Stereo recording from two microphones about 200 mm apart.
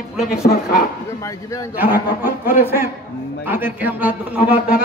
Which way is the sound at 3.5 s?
10° right (ahead or behind).